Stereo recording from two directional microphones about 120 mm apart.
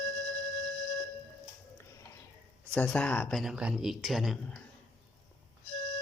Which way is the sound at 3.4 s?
5° right (ahead or behind).